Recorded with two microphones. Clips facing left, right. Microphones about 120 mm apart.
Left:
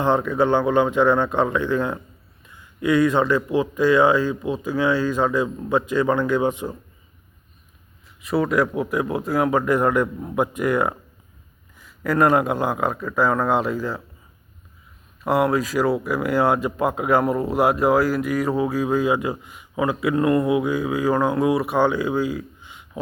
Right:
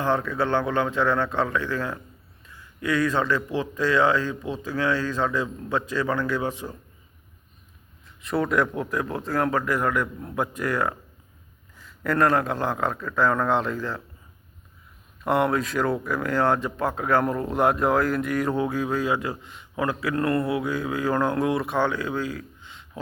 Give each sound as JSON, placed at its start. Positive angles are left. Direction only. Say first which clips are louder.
{"t": 0.0, "sound": "speech", "louder": "left 5 dB", "side_deg": 20}
{"t": 8.2, "sound": "speech", "louder": "left 3 dB", "side_deg": 5}
{"t": 15.2, "sound": "speech", "louder": "left 3 dB", "side_deg": 5}